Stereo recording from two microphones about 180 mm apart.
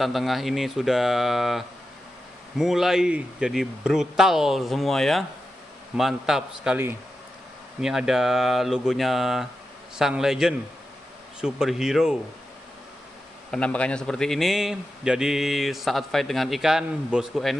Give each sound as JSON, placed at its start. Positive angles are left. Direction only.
{"t": 0.0, "sound": "a man's voice", "side_deg": 0}
{"t": 13.5, "sound": "a man's voice", "side_deg": 5}